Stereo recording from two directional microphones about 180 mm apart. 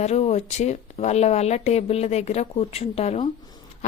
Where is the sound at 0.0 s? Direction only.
35° left (ahead or behind).